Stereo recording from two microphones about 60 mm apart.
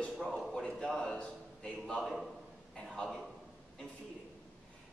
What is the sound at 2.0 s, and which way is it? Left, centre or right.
A man's voice, centre.